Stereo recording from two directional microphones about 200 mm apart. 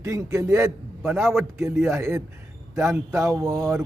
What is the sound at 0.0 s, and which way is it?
A man's voice, 15° right (ahead or behind).